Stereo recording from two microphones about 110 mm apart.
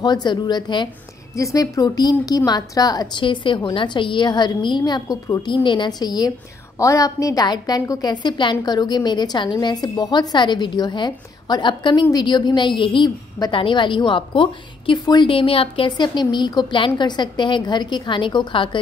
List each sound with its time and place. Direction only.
0.0 s a woman's voice: 40° left (ahead or behind)
1.3 s a woman's voice: 30° left (ahead or behind)
5.0 s a woman's voice: 30° left (ahead or behind)
5.4 s a woman's voice: 45° left (ahead or behind)